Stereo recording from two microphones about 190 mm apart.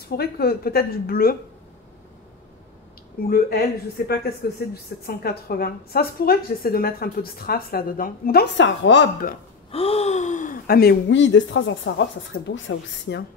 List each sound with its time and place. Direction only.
0.1 s speech: 55° left (ahead or behind)
3.3 s a woman's voice: 55° left (ahead or behind)
9.7 s speech: 30° left (ahead or behind); by 13.2 s 75° left (ahead or behind)